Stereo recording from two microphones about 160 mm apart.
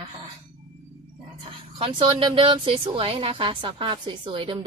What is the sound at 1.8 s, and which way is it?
Speech, 35° right (ahead or behind).